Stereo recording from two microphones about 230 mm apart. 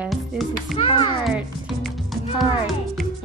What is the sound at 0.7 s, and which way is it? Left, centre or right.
Speech, left.